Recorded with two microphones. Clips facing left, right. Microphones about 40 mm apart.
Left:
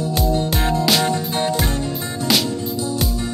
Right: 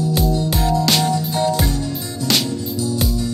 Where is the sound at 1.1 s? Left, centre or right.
Left.